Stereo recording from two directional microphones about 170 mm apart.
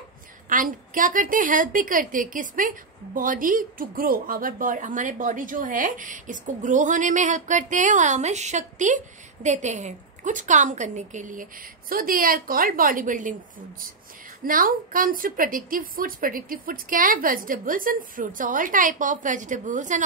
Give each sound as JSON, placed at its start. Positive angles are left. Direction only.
{"t": 0.5, "sound": "a woman's voice", "side_deg": -50}
{"t": 14.4, "sound": "a woman's voice", "side_deg": -55}